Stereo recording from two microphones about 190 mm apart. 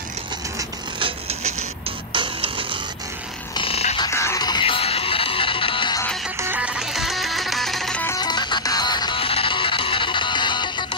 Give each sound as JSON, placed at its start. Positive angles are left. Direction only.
{"t": 0.6, "sound": "music", "side_deg": -25}
{"t": 3.5, "sound": "a sound", "side_deg": 30}
{"t": 4.1, "sound": "music", "side_deg": 15}
{"t": 6.3, "sound": "music", "side_deg": -10}
{"t": 8.2, "sound": "music", "side_deg": 25}